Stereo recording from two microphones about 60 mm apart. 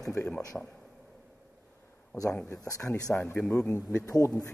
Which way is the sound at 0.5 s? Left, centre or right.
Centre.